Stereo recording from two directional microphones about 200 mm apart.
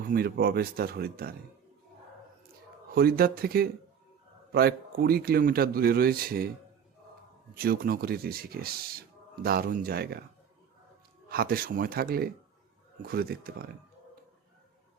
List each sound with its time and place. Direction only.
0.1 s speech: 50° right (ahead or behind)
2.9 s speech: 50° right (ahead or behind)
7.6 s speech: 50° right (ahead or behind)
11.3 s speech: 50° right (ahead or behind)